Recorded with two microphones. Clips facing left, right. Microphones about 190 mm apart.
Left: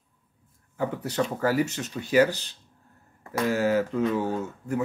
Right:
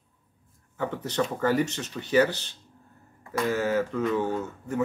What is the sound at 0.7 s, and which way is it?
Speech, 10° left (ahead or behind).